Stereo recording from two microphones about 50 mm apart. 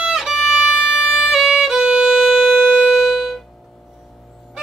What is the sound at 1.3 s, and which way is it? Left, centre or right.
Violin, centre.